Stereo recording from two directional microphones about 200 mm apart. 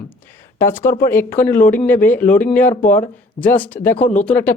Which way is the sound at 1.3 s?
40° left (ahead or behind).